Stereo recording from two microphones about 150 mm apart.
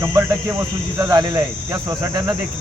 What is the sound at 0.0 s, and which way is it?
Speech, 20° right (ahead or behind).